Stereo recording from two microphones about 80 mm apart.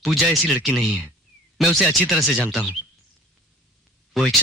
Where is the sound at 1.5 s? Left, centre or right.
Centre.